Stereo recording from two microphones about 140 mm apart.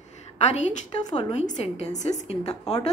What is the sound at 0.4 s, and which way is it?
A woman's voice, 55° left (ahead or behind).